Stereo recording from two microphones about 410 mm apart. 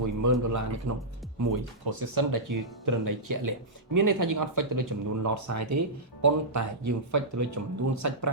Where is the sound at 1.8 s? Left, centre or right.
Right.